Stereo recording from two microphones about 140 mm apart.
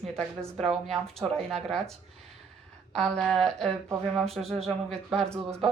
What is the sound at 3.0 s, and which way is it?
Speech, centre (ahead or behind).